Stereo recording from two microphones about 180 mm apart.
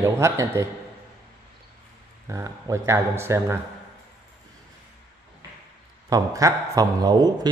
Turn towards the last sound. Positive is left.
turn(degrees=-25)  # may be behind; listen again after turning